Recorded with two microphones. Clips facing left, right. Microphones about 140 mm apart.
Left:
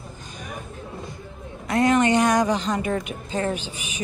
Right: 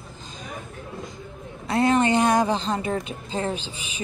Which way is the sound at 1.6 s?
30° right (ahead or behind).